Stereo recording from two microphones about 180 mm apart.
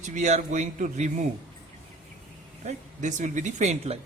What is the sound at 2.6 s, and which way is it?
Speech, 45° right (ahead or behind).